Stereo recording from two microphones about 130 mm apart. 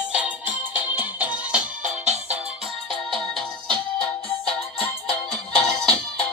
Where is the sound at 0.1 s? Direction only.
10° right (ahead or behind).